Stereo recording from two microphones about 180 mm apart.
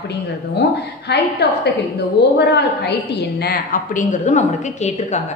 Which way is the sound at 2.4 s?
65° left (ahead or behind).